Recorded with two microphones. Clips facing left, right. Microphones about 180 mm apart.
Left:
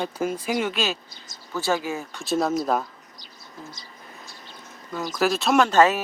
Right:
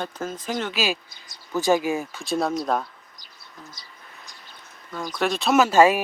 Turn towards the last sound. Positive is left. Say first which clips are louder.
# right 1 dB
turn(degrees=-10)  # may be behind; listen again after turning